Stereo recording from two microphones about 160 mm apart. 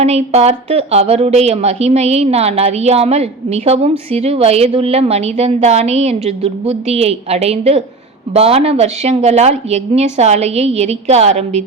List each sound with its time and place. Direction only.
0.0 s a woman's voice: 40° right (ahead or behind)